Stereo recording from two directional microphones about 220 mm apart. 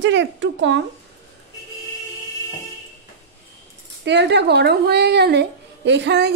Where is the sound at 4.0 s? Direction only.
50° right (ahead or behind).